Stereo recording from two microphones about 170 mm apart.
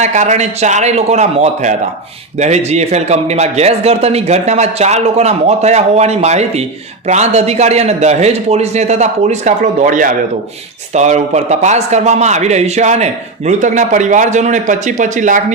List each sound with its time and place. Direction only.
0.0 s a man's voice: 45° right (ahead or behind)